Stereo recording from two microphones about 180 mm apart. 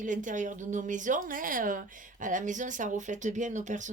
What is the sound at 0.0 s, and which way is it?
A woman's voice, 45° right (ahead or behind).